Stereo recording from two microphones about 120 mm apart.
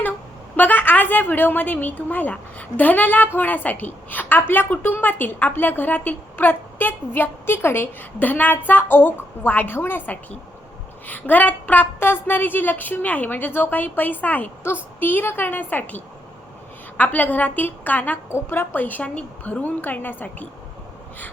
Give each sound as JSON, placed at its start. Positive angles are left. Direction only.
{"t": 0.5, "sound": "a woman's voice", "side_deg": 15}